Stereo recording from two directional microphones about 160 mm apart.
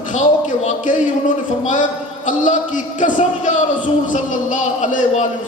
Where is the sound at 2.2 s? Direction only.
50° left (ahead or behind).